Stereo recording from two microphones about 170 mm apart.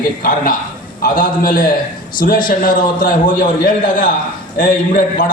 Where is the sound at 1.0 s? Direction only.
55° left (ahead or behind).